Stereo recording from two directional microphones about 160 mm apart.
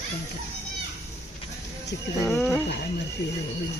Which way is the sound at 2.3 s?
Centre (ahead or behind).